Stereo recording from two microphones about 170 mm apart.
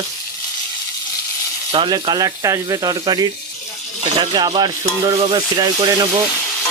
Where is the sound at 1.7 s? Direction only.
25° right (ahead or behind).